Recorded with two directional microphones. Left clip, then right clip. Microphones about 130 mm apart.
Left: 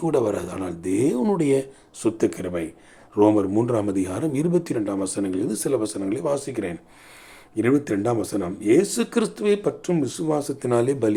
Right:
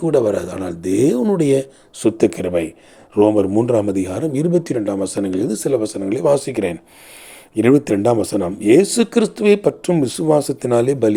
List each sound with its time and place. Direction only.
0.0 s speech: 20° right (ahead or behind)
5.5 s speech: 20° right (ahead or behind)
6.1 s speech: 35° right (ahead or behind)
9.0 s speech: 20° right (ahead or behind)
9.3 s speech: 40° right (ahead or behind); by 11.1 s 25° right (ahead or behind)